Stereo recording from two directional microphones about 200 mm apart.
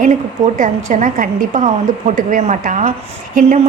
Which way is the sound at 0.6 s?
40° right (ahead or behind).